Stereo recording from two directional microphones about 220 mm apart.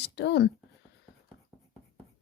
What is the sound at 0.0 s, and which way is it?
Speech, 50° left (ahead or behind).